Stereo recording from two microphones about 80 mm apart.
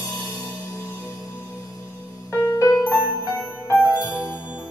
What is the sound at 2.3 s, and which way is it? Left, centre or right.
Music, left.